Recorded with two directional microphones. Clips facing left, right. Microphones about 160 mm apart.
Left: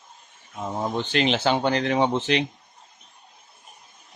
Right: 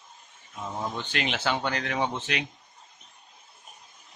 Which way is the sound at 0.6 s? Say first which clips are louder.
Left 6 dB; 35° left (ahead or behind).